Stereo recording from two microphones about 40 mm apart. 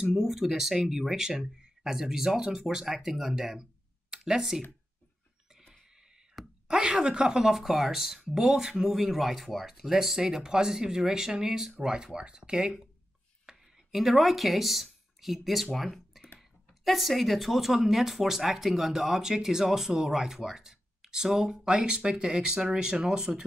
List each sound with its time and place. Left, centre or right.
0.0 s speech: centre
6.4 s a sound: centre
6.7 s speech: centre
7.5 s speech: centre
13.5 s speech: centre